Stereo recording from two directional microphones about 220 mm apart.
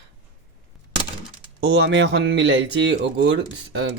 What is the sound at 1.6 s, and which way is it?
Speech, 50° right (ahead or behind).